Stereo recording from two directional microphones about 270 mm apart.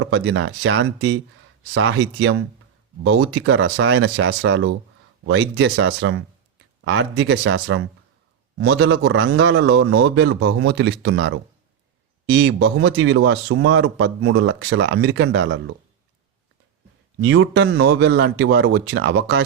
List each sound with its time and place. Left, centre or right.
0.0 s speech: right
17.2 s a man's voice: right